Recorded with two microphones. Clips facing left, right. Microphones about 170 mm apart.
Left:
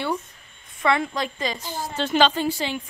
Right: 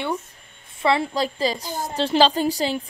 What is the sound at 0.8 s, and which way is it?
Speech, 30° right (ahead or behind).